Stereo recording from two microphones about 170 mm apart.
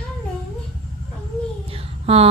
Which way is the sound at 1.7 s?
35° right (ahead or behind).